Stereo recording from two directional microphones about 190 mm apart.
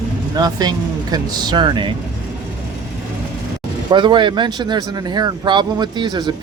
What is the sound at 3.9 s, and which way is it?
Speech, 25° right (ahead or behind).